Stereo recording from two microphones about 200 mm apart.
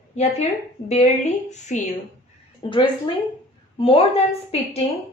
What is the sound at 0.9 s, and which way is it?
Speech, 35° left (ahead or behind).